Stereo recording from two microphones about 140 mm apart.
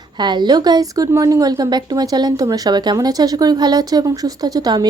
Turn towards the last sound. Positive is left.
turn(degrees=-25)  # may be behind; listen again after turning